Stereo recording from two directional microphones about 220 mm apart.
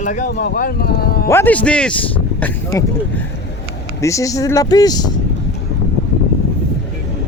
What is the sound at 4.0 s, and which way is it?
Speech, 15° left (ahead or behind).